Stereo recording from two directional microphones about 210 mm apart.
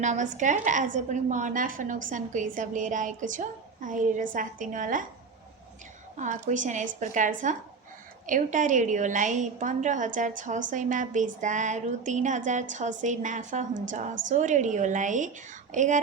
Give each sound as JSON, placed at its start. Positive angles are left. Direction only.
{"t": 0.0, "sound": "a woman's voice", "side_deg": -35}
{"t": 6.1, "sound": "a woman's voice", "side_deg": -35}